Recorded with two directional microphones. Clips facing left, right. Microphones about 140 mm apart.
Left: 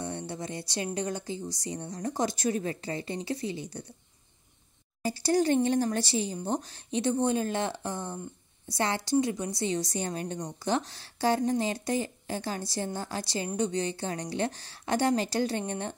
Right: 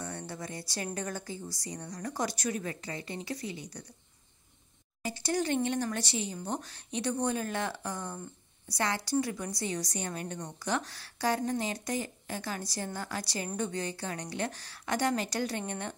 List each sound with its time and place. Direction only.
0.0 s a sound: 25° left (ahead or behind)
0.8 s a woman's voice: 20° left (ahead or behind)
5.0 s a woman's voice: 35° left (ahead or behind)